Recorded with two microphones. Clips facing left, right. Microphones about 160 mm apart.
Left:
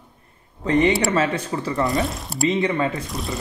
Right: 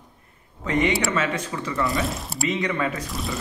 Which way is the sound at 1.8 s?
Centre (ahead or behind).